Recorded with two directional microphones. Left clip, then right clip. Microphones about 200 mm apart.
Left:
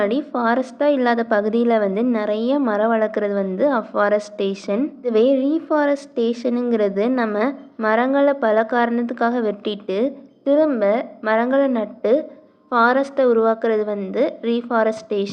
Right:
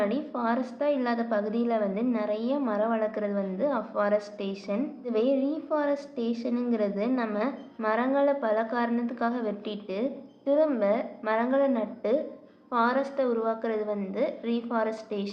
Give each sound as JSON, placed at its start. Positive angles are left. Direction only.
{"t": 0.0, "sound": "a woman's voice", "side_deg": 35}